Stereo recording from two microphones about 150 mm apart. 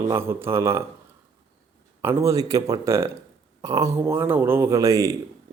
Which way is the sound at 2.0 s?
20° right (ahead or behind).